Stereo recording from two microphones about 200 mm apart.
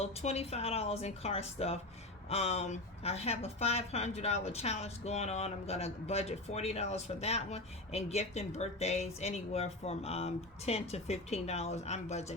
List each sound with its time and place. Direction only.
0.0 s a woman's voice: 30° left (ahead or behind)